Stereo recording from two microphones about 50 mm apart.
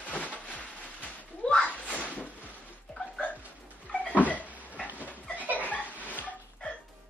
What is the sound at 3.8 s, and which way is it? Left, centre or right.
Cupboard open or close, left.